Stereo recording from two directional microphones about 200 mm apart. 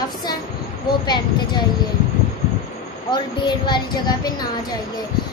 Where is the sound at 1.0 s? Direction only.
20° left (ahead or behind).